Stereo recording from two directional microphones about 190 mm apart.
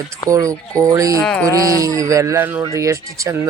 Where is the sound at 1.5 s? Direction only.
15° right (ahead or behind).